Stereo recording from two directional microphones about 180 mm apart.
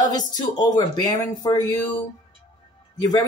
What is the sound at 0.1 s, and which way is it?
Speech, 20° left (ahead or behind).